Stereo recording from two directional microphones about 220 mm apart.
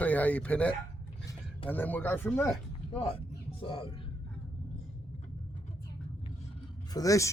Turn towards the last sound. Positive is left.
turn(degrees=15)  # may be behind; listen again after turning